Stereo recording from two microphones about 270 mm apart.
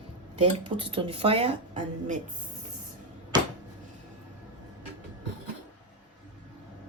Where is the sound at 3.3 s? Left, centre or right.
Centre.